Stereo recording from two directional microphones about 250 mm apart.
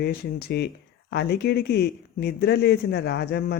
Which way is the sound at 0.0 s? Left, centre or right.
Left.